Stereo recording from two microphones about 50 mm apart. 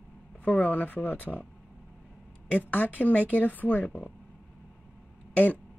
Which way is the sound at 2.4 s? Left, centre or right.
Left.